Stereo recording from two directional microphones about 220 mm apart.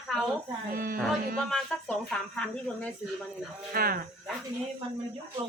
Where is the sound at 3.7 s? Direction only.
40° right (ahead or behind).